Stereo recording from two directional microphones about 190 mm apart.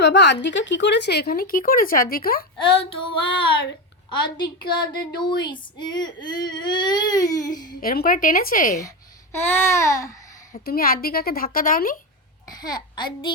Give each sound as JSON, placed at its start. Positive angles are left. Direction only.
{"t": 0.0, "sound": "speech", "side_deg": 65}
{"t": 2.6, "sound": "baby cry", "side_deg": 25}
{"t": 4.9, "sound": "baby cry", "side_deg": 25}
{"t": 7.8, "sound": "a woman's voice", "side_deg": 50}
{"t": 9.3, "sound": "babbling", "side_deg": 10}
{"t": 10.5, "sound": "a woman's voice", "side_deg": 50}
{"t": 12.5, "sound": "a child's voice", "side_deg": 20}